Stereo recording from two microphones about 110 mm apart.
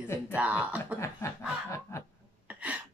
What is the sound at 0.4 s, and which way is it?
Music, 10° right (ahead or behind).